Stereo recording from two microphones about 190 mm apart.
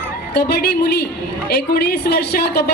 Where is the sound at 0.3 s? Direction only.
55° left (ahead or behind).